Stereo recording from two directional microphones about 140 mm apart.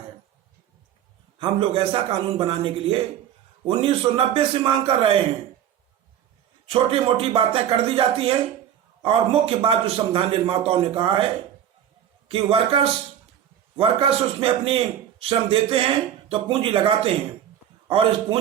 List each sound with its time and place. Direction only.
1.4 s a man's voice: 40° right (ahead or behind)
6.7 s a man's voice: 45° right (ahead or behind)
12.3 s a man's voice: 40° right (ahead or behind)